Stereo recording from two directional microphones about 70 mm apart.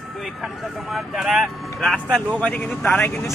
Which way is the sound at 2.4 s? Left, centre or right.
Left.